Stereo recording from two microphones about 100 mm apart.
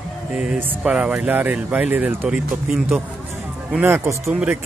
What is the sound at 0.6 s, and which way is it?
Speech, 15° right (ahead or behind).